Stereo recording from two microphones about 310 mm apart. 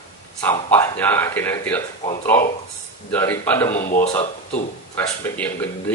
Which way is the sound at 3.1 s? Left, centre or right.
Centre.